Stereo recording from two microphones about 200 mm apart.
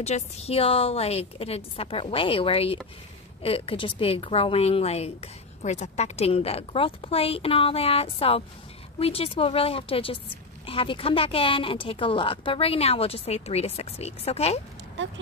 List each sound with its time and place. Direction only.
0.0 s a woman's voice: 35° left (ahead or behind)